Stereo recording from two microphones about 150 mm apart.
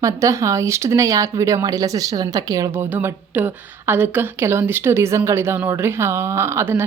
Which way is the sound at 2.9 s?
15° right (ahead or behind).